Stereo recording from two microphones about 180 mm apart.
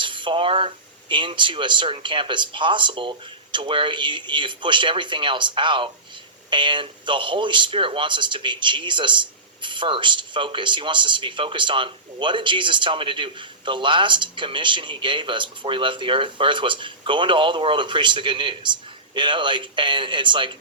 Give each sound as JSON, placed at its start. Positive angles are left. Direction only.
{"t": 0.0, "sound": "speech", "side_deg": -25}